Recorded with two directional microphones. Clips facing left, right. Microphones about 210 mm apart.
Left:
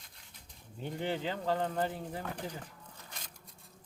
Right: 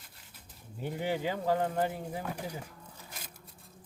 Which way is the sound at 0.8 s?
10° right (ahead or behind).